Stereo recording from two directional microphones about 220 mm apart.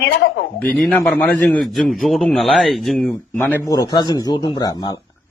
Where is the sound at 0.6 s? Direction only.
5° left (ahead or behind).